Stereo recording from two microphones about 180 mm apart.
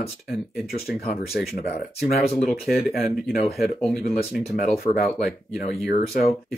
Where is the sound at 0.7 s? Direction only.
35° left (ahead or behind).